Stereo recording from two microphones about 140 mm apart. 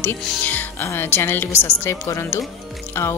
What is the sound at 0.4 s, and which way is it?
Speech, 10° left (ahead or behind).